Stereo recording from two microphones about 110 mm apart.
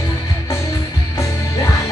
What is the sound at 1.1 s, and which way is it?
Music, 25° left (ahead or behind).